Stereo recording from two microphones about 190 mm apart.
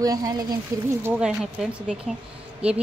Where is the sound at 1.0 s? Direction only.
5° right (ahead or behind).